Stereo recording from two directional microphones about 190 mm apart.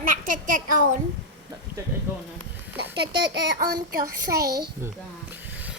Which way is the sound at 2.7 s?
60° right (ahead or behind).